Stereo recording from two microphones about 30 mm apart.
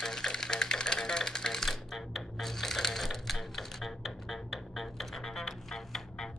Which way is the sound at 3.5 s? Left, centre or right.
Centre.